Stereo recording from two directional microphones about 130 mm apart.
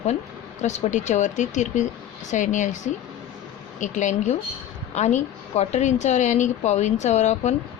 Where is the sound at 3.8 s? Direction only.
70° left (ahead or behind).